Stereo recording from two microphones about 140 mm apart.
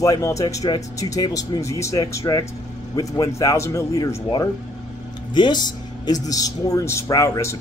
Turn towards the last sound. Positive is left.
turn(degrees=20)  # may be behind; listen again after turning